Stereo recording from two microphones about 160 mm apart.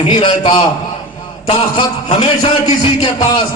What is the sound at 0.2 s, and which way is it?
A man's voice, 30° left (ahead or behind).